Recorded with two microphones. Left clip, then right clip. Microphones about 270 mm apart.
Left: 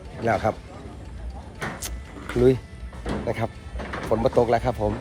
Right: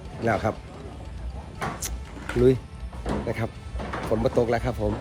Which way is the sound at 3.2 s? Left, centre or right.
Centre.